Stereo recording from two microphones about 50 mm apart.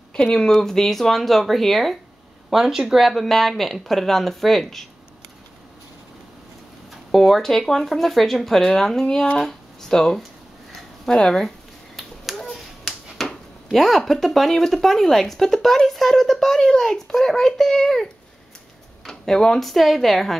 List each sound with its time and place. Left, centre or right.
0.1 s speech: centre
2.5 s speech: centre
3.0 s speech: centre
6.9 s speech: centre
9.4 s a sound: centre
9.8 s speech: centre
12.4 s a sound: centre
13.7 s speech: centre